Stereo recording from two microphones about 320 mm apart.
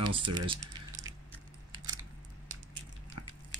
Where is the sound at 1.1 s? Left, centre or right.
Centre.